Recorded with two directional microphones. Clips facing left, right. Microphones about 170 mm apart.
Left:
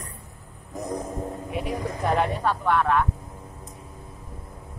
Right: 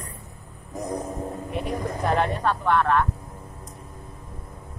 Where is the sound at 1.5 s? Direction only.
5° left (ahead or behind).